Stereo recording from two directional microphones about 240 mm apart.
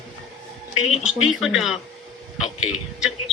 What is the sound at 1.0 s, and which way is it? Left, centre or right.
Speech, centre.